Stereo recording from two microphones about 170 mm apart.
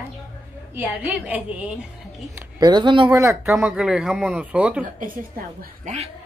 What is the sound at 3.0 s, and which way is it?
Speech, 15° right (ahead or behind).